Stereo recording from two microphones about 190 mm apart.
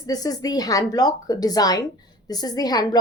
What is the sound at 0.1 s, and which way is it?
A woman's voice, 20° left (ahead or behind).